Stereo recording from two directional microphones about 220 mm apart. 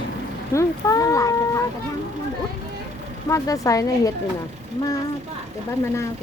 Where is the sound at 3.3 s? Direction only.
15° left (ahead or behind).